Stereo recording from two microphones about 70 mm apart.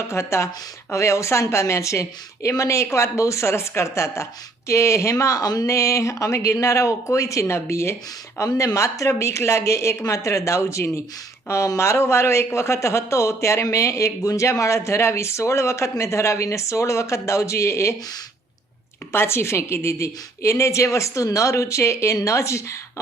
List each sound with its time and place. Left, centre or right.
0.1 s a man's voice: left
19.1 s a man's voice: left